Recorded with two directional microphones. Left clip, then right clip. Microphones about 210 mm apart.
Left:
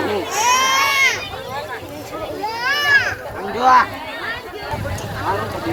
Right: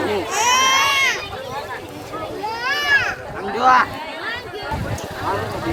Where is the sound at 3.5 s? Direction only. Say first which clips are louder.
Left 1 dB; 15° left (ahead or behind).